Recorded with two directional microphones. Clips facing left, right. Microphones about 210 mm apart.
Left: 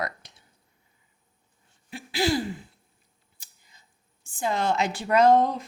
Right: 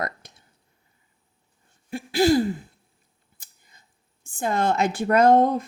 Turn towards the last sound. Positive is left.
turn(degrees=-50)  # may be behind; listen again after turning